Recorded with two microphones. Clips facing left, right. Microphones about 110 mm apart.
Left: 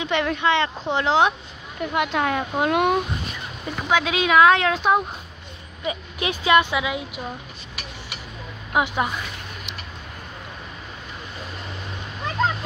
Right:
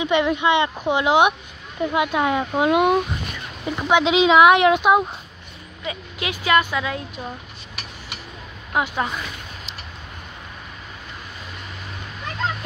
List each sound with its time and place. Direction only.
0.0 s speech: 10° right (ahead or behind)
3.6 s speech: 20° right (ahead or behind)
5.9 s speech: 25° left (ahead or behind)
8.7 s speech: 15° left (ahead or behind)